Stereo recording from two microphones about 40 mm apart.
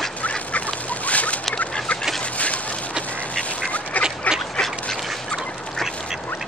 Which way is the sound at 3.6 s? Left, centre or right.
Left.